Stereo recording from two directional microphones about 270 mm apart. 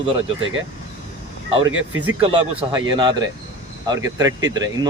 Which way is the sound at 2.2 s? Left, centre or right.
Right.